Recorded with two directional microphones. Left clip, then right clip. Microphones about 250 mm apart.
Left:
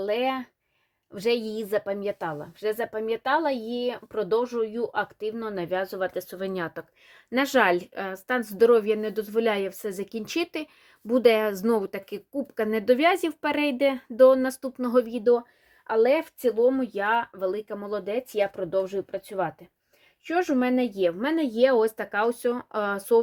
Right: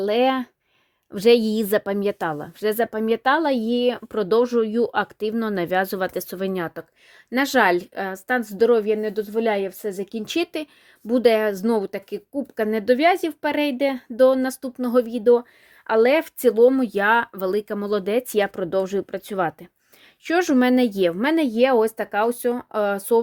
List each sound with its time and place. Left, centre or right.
0.0 s a woman's voice: right